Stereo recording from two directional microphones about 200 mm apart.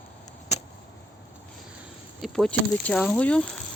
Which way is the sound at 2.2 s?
Centre (ahead or behind).